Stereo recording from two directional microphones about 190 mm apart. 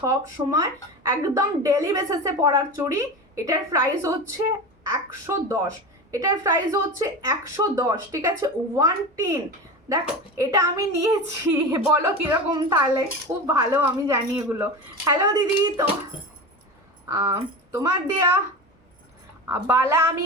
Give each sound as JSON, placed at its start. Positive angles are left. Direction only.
{"t": 0.0, "sound": "speech", "side_deg": -15}
{"t": 17.1, "sound": "speech", "side_deg": -15}
{"t": 19.5, "sound": "speech", "side_deg": -10}